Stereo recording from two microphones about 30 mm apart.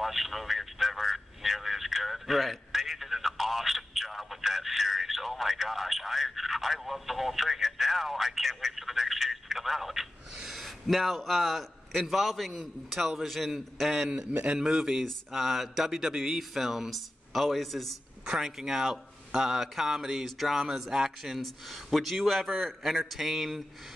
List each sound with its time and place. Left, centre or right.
0.0 s a man's voice: centre
10.5 s a sound: centre
11.1 s a man's voice: centre
14.5 s speech: right
15.3 s speech: centre
16.9 s speech: centre
18.3 s speech: centre
19.6 s speech: centre
21.4 s a man's voice: centre